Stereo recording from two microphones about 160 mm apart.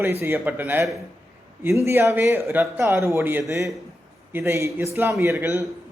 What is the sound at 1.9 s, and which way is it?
A man's voice, 15° right (ahead or behind).